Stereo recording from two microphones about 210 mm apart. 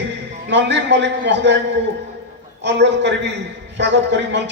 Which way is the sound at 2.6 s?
55° right (ahead or behind).